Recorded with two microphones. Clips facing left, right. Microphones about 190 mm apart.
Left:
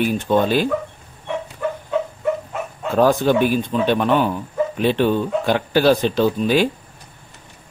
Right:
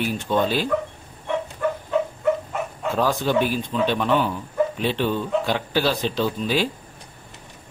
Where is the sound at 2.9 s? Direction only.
55° left (ahead or behind).